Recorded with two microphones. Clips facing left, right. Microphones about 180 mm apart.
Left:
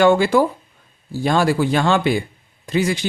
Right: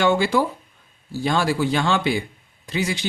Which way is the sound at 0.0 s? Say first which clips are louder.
Left 5 dB; 50° left (ahead or behind).